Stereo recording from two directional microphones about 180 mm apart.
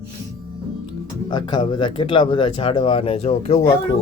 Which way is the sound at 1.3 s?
25° left (ahead or behind).